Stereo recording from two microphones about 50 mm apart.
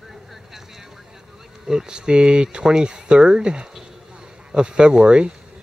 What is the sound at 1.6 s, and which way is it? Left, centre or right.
Speech, centre.